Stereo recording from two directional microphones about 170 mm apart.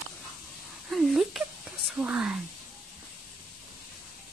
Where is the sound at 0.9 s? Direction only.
Centre (ahead or behind).